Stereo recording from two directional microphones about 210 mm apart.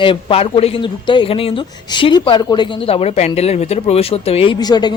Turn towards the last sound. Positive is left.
turn(degrees=20)  # may be behind; listen again after turning